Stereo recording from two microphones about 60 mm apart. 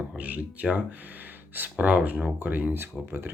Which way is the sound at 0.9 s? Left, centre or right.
Right.